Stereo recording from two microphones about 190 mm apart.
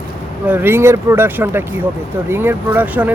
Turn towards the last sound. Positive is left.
turn(degrees=-10)  # may be behind; listen again after turning